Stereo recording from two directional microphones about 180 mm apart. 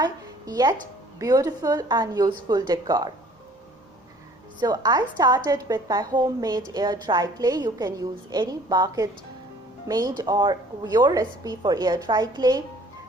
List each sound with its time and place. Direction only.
0.0 s a sound: 20° right (ahead or behind)
1.2 s a woman's voice: 20° right (ahead or behind)
4.6 s a woman's voice: 20° right (ahead or behind)